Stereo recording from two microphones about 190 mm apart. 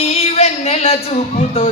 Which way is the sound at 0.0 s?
30° left (ahead or behind).